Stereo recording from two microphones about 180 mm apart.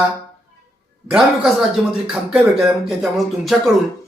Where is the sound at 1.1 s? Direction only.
5° right (ahead or behind).